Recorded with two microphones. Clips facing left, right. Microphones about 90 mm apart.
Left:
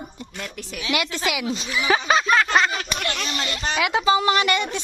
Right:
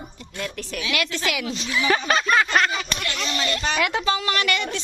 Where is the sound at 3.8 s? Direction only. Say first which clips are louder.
Left 4 dB; 5° left (ahead or behind).